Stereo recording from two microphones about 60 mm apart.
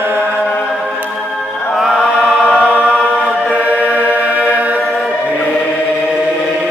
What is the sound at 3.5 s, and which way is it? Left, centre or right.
Choir, right.